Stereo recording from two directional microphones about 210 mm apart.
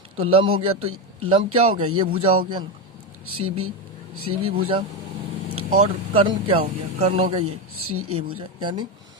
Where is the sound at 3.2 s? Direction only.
90° right.